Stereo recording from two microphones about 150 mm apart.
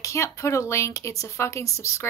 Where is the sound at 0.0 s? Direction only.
20° left (ahead or behind).